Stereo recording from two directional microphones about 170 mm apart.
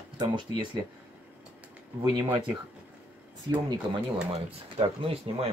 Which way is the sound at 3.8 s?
25° right (ahead or behind).